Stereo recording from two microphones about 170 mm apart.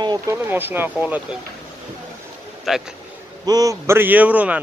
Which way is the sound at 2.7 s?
Centre (ahead or behind).